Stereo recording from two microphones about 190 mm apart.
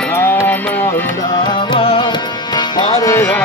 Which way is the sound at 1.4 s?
25° left (ahead or behind).